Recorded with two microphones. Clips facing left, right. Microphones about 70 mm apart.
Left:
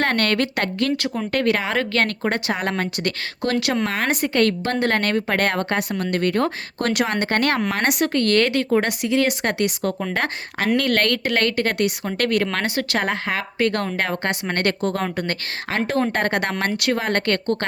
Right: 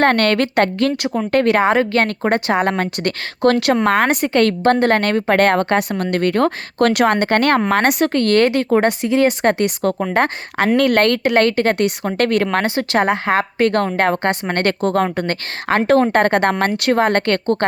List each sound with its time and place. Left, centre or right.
0.0 s a woman's voice: right
1.0 s a woman's voice: right
1.3 s a woman's voice: right
1.7 s a woman's voice: right